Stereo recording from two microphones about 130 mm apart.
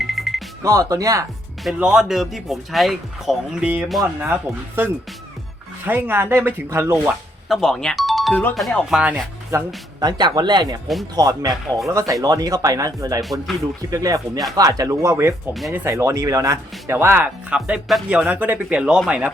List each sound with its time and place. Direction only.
0.0 s music: centre (ahead or behind)
0.6 s speech: 25° right (ahead or behind)
1.6 s speech: 5° right (ahead or behind)
7.4 s speech: centre (ahead or behind)
9.5 s speech: 20° right (ahead or behind)
10.1 s speech: 35° right (ahead or behind); by 19.3 s 10° right (ahead or behind)